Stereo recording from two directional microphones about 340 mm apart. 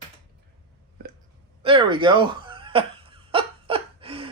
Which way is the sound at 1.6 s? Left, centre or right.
Centre.